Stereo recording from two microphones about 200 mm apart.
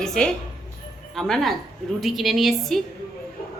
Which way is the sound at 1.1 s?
Centre (ahead or behind).